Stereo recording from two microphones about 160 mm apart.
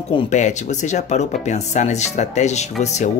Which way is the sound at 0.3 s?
45° left (ahead or behind).